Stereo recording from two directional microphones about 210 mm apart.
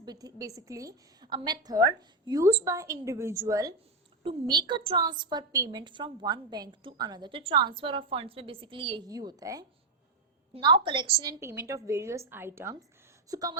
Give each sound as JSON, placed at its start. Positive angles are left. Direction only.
{"t": 0.0, "sound": "a woman's voice", "side_deg": -20}